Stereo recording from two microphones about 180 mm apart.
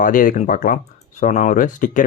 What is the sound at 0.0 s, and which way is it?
Speech, 50° left (ahead or behind).